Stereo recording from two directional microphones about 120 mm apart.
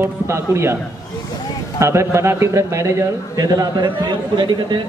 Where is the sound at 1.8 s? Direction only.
25° right (ahead or behind); by 4.8 s 40° right (ahead or behind).